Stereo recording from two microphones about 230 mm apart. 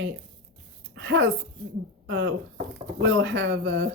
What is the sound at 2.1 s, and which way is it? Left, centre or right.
Speech, right.